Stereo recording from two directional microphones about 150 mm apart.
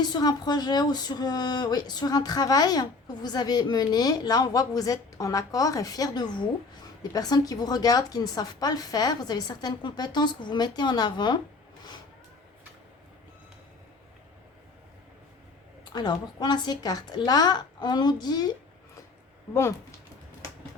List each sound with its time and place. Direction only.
0.0 s speech: 25° left (ahead or behind)
15.8 s speech: 30° left (ahead or behind)